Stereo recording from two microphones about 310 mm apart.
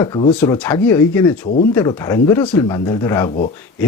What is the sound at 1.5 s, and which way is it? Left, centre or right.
Speech, left.